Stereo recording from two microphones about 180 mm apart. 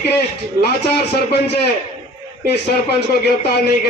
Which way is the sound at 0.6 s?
65° left (ahead or behind).